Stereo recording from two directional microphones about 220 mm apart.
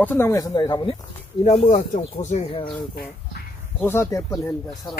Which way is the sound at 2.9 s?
45° left (ahead or behind).